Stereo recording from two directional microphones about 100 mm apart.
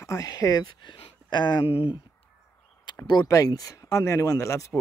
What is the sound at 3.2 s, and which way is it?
Speech, 35° left (ahead or behind).